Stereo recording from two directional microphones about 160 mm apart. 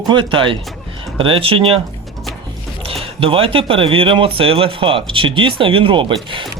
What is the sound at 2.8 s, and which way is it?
Speech, 35° right (ahead or behind).